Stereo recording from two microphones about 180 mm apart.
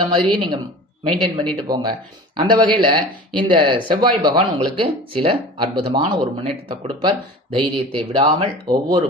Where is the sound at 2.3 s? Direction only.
25° right (ahead or behind).